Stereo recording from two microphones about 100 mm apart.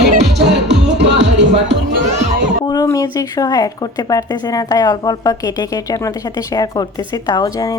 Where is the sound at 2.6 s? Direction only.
40° left (ahead or behind).